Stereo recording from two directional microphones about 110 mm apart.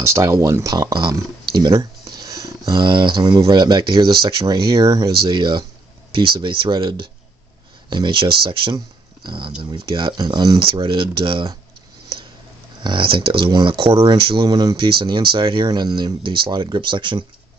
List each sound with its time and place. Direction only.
0.0 s speech: 25° right (ahead or behind); by 8.7 s 45° right (ahead or behind)
8.7 s a sound: 45° right (ahead or behind)
9.6 s speech: 45° right (ahead or behind)
10.8 s speech: 50° right (ahead or behind)
12.8 s speech: 50° right (ahead or behind); by 14.8 s 35° right (ahead or behind)
14.8 s speech: 50° right (ahead or behind)